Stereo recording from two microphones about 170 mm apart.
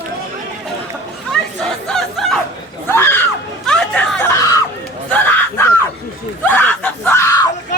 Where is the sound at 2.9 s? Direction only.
15° left (ahead or behind).